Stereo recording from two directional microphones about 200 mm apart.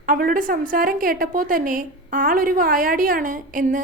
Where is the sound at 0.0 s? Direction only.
45° right (ahead or behind).